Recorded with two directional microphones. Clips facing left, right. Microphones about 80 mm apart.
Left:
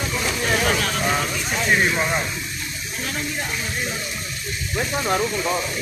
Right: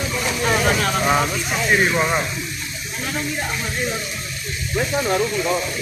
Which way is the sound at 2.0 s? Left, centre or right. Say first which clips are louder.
Right 3 dB; centre.